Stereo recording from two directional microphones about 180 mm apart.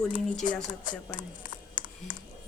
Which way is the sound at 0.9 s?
45° left (ahead or behind).